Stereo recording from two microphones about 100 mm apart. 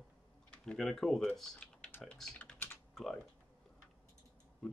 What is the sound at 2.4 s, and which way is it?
Typing, 15° left (ahead or behind).